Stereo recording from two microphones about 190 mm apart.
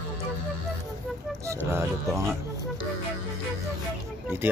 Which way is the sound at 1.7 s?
15° right (ahead or behind).